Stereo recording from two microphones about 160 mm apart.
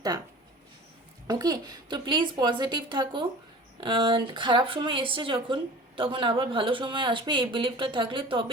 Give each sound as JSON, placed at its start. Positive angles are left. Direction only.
{"t": 1.3, "sound": "a woman's voice", "side_deg": -25}